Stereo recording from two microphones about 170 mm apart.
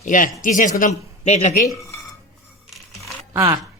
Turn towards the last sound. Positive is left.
turn(degrees=-20)  # may be behind; listen again after turning